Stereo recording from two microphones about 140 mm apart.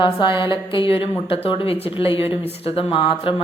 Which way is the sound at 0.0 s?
35° left (ahead or behind).